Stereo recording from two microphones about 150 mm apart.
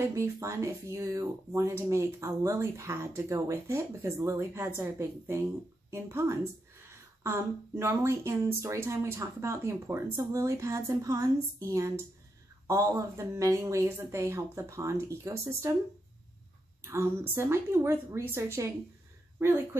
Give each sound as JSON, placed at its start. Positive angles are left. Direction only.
{"t": 0.1, "sound": "speech", "side_deg": -20}
{"t": 16.8, "sound": "a woman's voice", "side_deg": -15}